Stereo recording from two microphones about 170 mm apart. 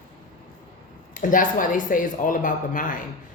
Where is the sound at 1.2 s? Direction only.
50° left (ahead or behind).